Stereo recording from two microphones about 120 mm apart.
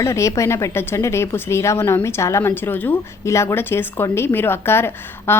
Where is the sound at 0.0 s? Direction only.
25° left (ahead or behind).